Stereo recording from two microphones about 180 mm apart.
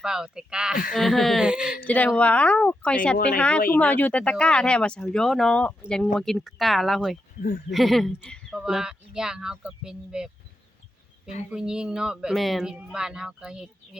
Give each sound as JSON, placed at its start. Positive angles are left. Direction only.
{"t": 0.0, "sound": "a woman's voice", "side_deg": -5}
{"t": 1.8, "sound": "a woman's voice", "side_deg": 10}
{"t": 7.3, "sound": "speech", "side_deg": 50}
{"t": 7.7, "sound": "a woman's voice", "side_deg": 0}
{"t": 11.5, "sound": "a woman's voice", "side_deg": -5}